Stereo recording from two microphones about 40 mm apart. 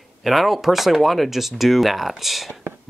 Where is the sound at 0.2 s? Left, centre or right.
Centre.